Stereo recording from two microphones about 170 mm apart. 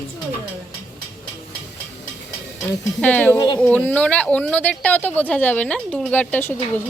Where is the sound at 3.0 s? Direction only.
10° left (ahead or behind).